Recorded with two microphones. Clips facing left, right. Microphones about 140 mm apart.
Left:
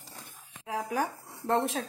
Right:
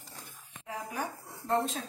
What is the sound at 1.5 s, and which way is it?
Dog, 90° left.